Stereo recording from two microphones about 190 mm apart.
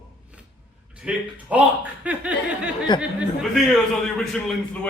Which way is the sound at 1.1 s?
5° right (ahead or behind).